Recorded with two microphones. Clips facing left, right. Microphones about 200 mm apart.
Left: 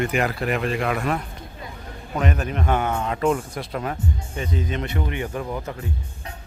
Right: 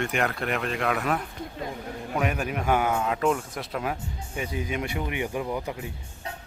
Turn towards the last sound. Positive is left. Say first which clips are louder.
# left 1 dB
turn(degrees=-15)  # may be behind; listen again after turning